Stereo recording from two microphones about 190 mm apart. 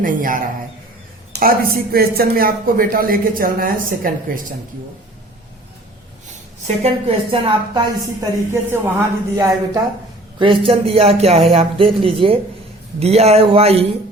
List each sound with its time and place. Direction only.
0.0 s speech: 45° right (ahead or behind)
6.8 s speech: 30° right (ahead or behind)
8.7 s a woman's voice: 15° right (ahead or behind)
10.3 s speech: 25° right (ahead or behind)